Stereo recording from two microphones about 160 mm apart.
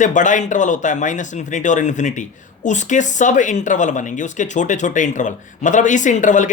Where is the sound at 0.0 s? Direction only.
50° left (ahead or behind).